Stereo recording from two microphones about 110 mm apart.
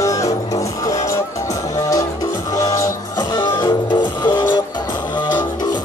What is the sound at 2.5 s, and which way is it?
Music, 30° left (ahead or behind).